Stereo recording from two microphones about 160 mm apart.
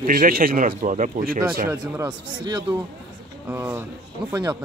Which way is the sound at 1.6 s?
20° right (ahead or behind).